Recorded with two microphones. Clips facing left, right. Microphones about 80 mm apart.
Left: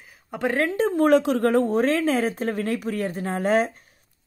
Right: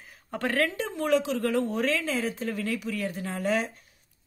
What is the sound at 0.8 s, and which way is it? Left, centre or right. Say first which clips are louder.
A woman's voice: left 8 dB; left.